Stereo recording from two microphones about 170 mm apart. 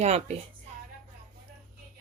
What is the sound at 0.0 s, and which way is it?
Speech, 40° right (ahead or behind).